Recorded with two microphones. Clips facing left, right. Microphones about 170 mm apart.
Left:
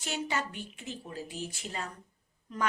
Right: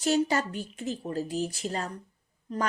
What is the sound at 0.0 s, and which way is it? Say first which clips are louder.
A woman's voice: right 9 dB; 40° right (ahead or behind).